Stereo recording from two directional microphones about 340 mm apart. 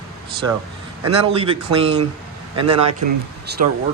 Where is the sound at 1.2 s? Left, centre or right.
Centre.